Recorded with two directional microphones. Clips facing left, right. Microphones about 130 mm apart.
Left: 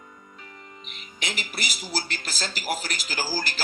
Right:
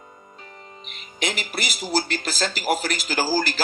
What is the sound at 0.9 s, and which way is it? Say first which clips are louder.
Speech: right 7 dB; 70° right (ahead or behind).